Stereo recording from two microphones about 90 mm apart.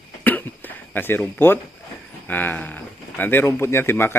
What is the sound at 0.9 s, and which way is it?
Speech, 25° left (ahead or behind).